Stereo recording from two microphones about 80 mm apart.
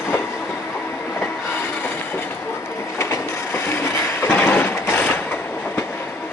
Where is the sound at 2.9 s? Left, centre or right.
Left.